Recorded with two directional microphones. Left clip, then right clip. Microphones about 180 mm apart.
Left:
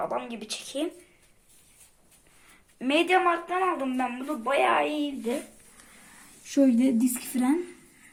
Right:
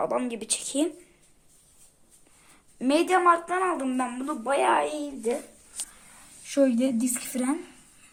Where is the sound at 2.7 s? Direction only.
20° right (ahead or behind).